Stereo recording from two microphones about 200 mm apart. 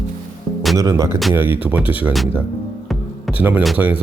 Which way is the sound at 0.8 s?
15° right (ahead or behind).